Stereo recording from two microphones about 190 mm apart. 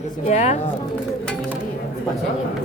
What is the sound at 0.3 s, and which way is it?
Speech, 35° left (ahead or behind).